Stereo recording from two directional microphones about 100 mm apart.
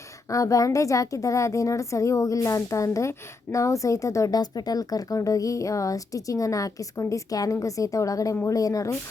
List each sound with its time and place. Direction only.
0.3 s a woman's voice: 35° left (ahead or behind)